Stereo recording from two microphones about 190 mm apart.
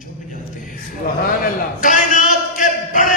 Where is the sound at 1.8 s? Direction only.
40° left (ahead or behind).